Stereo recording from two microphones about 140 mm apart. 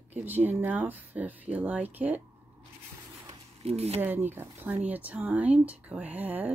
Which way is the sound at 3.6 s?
50° right (ahead or behind).